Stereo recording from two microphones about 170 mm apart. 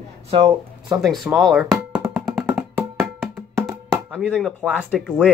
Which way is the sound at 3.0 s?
Centre (ahead or behind).